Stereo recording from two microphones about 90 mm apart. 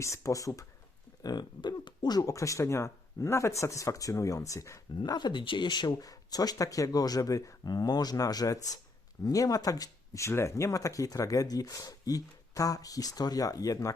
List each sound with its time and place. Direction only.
0.0 s speech: 35° left (ahead or behind)
1.2 s speech: 50° left (ahead or behind); by 4.8 s 35° left (ahead or behind)
5.0 s speech: 55° left (ahead or behind)
6.1 s speech: 45° left (ahead or behind)